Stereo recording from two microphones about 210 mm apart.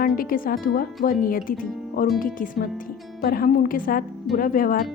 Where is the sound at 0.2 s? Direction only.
45° left (ahead or behind).